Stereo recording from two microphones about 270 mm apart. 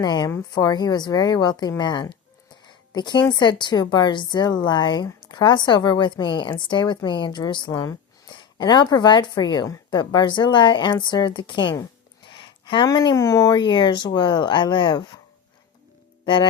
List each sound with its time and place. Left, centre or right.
0.0 s a woman's voice: centre
2.6 s a sound: centre
3.3 s a woman's voice: centre
16.2 s speech: centre